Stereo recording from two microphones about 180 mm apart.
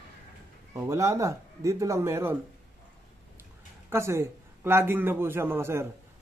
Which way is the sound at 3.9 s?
15° right (ahead or behind).